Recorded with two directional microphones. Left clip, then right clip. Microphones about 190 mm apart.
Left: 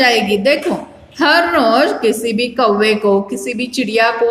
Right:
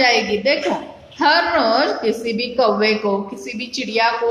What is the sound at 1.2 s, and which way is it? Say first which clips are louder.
A woman's voice: left 3 dB; 50° left (ahead or behind).